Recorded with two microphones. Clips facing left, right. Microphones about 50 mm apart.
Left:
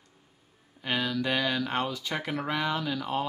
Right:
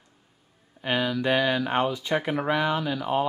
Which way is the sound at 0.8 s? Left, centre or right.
Centre.